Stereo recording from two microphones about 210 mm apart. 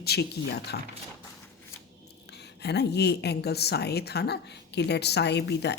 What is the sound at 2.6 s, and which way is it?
Speech, 50° left (ahead or behind).